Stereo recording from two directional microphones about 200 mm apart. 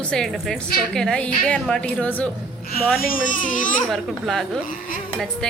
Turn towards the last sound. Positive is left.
turn(degrees=0)  # may be behind; listen again after turning